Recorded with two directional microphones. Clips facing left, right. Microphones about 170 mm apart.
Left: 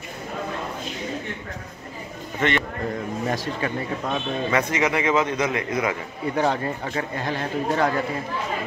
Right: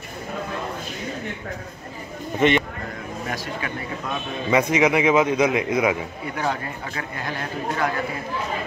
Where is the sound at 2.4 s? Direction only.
20° right (ahead or behind).